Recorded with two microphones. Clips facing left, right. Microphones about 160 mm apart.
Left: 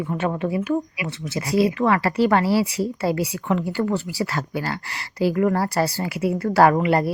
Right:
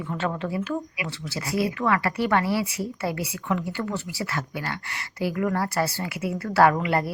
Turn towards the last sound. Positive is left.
turn(degrees=25)  # may be behind; listen again after turning